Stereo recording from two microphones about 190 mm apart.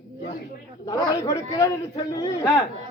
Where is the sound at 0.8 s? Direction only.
20° left (ahead or behind).